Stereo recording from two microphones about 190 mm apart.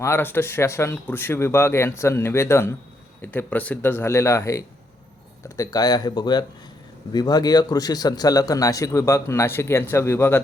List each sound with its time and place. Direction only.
0.0 s a man's voice: 10° left (ahead or behind)